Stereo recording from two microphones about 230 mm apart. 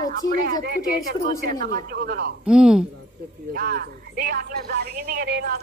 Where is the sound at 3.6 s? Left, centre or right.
Right.